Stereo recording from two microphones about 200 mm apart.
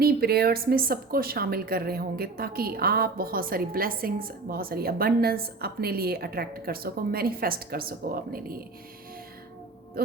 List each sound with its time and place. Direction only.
0.0 s a woman's voice: 50° right (ahead or behind)